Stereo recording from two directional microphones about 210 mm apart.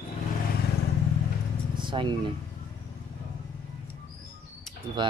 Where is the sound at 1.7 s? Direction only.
20° right (ahead or behind).